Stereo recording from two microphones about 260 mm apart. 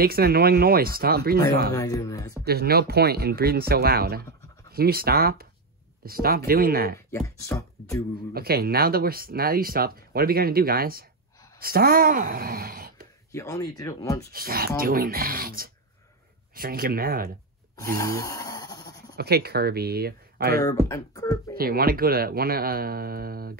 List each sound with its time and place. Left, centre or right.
0.0 s speech: right
1.8 s speech: centre
2.4 s speech: right
7.1 s speech: centre
8.3 s speech: right
13.3 s speech: centre
14.3 s speech: right
17.7 s snoring: centre
19.1 s speech: right
20.6 s speech: centre
21.5 s speech: right